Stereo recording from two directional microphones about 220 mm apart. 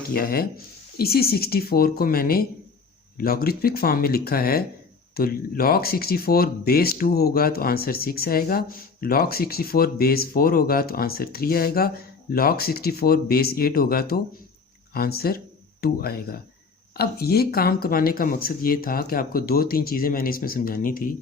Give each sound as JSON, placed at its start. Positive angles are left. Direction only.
{"t": 0.1, "sound": "speech", "side_deg": 45}